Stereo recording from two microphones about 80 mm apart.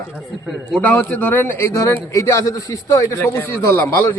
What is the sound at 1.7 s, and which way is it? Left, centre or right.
A man's voice, left.